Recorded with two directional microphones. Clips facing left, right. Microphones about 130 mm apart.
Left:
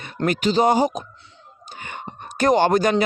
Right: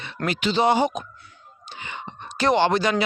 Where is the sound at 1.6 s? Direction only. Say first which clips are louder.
Left 1 dB; 45° left (ahead or behind).